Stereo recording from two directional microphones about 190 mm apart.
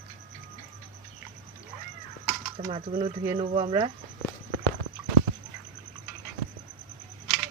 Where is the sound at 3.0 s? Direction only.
30° right (ahead or behind).